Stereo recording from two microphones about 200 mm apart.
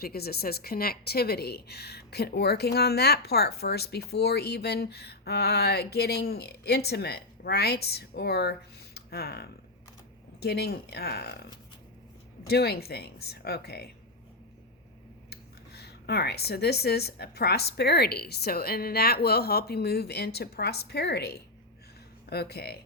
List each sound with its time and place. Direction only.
0.0 s speech: 50° left (ahead or behind)
12.5 s speech: 55° left (ahead or behind)
15.3 s speech: 55° left (ahead or behind)